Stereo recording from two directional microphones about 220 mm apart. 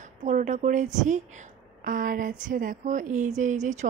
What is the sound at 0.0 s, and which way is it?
Speech, 35° right (ahead or behind).